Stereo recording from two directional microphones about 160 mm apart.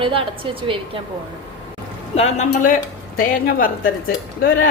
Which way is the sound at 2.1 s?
45° left (ahead or behind).